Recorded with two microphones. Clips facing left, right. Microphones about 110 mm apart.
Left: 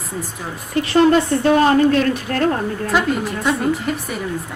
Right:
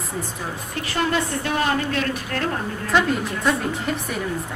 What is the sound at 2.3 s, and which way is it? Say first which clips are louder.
Speech: left 7 dB; 40° left (ahead or behind).